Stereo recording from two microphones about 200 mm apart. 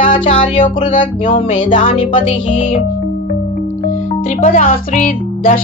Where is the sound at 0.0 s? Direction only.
25° left (ahead or behind).